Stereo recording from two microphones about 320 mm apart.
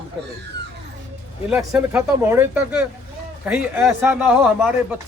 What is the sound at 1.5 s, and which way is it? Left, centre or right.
A man's voice, centre.